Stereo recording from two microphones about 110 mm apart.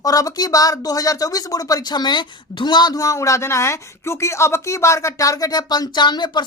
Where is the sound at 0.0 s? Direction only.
35° left (ahead or behind).